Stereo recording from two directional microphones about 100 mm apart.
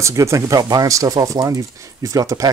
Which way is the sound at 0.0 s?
30° right (ahead or behind).